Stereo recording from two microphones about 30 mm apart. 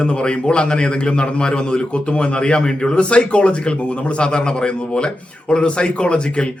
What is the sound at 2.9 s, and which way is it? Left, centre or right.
Speech, left.